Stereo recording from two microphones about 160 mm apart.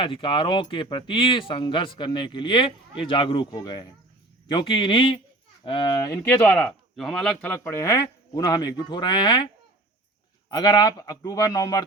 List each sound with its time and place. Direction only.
0.0 s a man's voice: 30° left (ahead or behind)
6.2 s speech: 10° left (ahead or behind); by 9.5 s 25° left (ahead or behind)
10.5 s a man's voice: 25° left (ahead or behind)